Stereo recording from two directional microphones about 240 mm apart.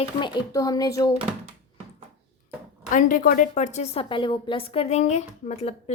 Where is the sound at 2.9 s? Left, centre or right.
Left.